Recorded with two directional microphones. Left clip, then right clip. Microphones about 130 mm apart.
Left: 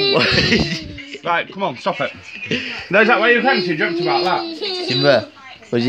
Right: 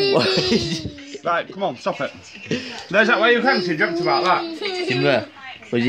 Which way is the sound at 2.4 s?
15° right (ahead or behind).